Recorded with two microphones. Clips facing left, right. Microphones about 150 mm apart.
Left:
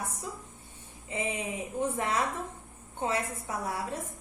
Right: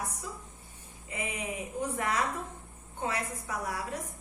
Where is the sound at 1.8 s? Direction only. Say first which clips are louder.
Left 2 dB; 25° left (ahead or behind).